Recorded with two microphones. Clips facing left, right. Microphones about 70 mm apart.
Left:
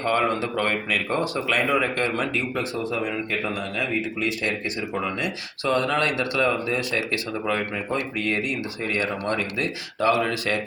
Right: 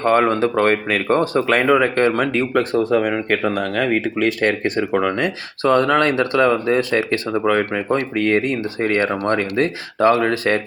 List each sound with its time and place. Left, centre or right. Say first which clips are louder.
0.0 s speech: right 7 dB; right
7.4 s speech: right 9 dB; right
7.9 s speech: right 8 dB; right